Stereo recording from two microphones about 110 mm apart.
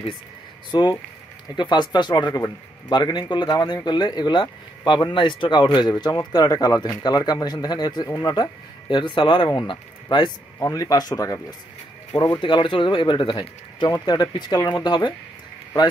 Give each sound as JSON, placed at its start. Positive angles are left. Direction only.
{"t": 0.7, "sound": "speech", "side_deg": 45}
{"t": 10.6, "sound": "speech", "side_deg": 35}
{"t": 12.4, "sound": "speech", "side_deg": 45}